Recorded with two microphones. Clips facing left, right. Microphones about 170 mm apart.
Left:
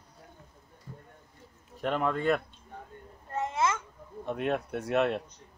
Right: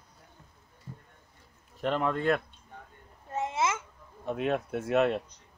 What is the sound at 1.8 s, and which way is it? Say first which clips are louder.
Speech: even; centre (ahead or behind).